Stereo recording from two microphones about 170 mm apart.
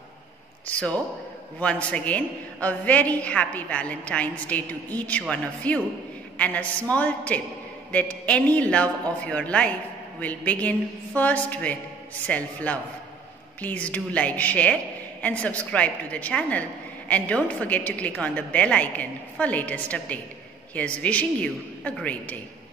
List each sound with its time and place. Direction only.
0.7 s a woman's voice: 10° left (ahead or behind)